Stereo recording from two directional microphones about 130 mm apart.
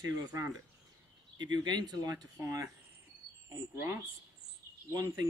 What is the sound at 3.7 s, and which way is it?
Speech, 20° right (ahead or behind).